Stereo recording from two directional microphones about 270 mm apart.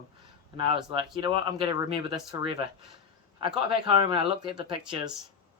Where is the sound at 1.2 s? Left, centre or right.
Centre.